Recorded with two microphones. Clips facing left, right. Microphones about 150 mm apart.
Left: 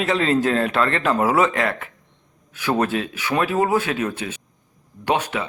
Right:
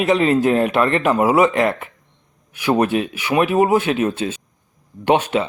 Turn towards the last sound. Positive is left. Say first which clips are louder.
# right 6 dB
turn(degrees=-25)  # may be behind; listen again after turning